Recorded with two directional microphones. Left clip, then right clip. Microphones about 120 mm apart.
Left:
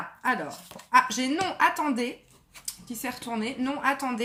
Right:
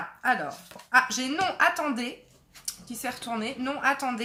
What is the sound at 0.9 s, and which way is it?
Speech, 15° right (ahead or behind).